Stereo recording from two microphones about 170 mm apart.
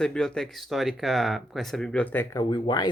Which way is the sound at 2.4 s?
25° left (ahead or behind).